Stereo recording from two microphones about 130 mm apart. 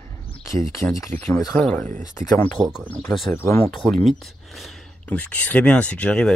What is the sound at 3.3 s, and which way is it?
Speech, 20° left (ahead or behind).